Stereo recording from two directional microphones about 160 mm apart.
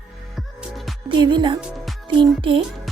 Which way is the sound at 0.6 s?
Centre (ahead or behind).